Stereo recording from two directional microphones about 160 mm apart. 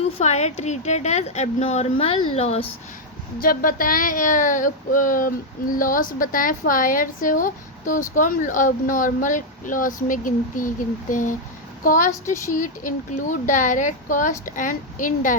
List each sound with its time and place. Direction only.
0.0 s a woman's voice: 45° left (ahead or behind)
3.4 s a woman's voice: 60° left (ahead or behind)